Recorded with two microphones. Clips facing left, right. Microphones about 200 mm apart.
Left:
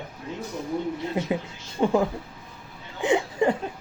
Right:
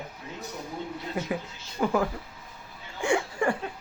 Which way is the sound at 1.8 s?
25° left (ahead or behind).